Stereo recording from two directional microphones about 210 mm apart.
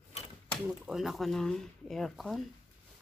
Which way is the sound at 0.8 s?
Centre (ahead or behind).